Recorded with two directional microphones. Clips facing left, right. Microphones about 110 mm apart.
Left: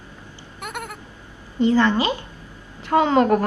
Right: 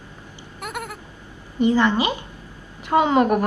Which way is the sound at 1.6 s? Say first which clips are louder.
Left 1 dB; 15° right (ahead or behind).